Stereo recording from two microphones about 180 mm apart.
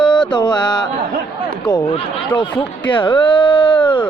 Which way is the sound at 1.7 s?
25° left (ahead or behind).